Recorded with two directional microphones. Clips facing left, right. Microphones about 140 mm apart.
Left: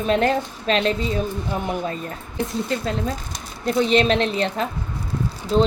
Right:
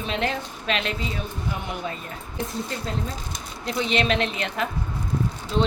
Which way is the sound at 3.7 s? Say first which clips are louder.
Left 6 dB; 40° left (ahead or behind).